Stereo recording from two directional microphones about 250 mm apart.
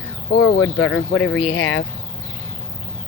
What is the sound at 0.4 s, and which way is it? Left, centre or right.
Speech, left.